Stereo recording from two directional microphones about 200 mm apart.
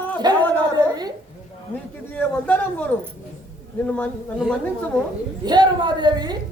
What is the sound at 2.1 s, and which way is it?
A man's voice, 5° left (ahead or behind).